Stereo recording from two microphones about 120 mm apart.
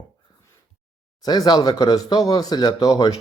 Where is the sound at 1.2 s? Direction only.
35° left (ahead or behind).